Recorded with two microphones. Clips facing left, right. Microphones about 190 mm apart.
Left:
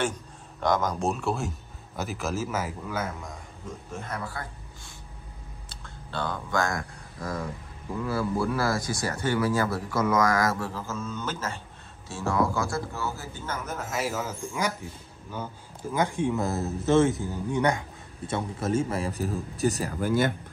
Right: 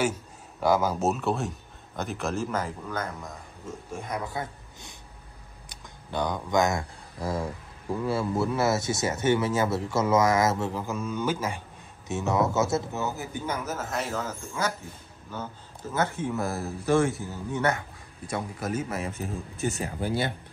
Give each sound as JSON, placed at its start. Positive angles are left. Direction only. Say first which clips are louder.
{"t": 0.6, "sound": "a man's voice", "louder": "right 2 dB", "side_deg": -5}
{"t": 4.0, "sound": "a man's voice", "louder": "right 4 dB", "side_deg": -15}
{"t": 5.7, "sound": "a sound", "louder": "right 4 dB", "side_deg": -15}
{"t": 8.1, "sound": "speech", "louder": "even", "side_deg": -25}
{"t": 13.7, "sound": "a man's voice", "louder": "even", "side_deg": 0}